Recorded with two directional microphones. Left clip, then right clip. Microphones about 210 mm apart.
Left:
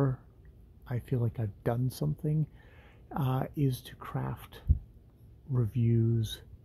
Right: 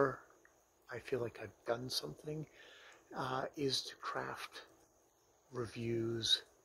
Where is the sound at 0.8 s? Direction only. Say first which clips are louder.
Left 3 dB; 15° left (ahead or behind).